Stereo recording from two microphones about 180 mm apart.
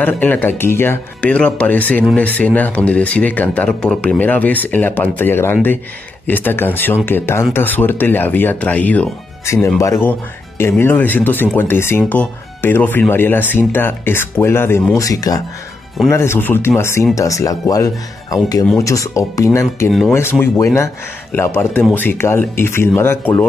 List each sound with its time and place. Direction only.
0.0 s speech: 10° left (ahead or behind)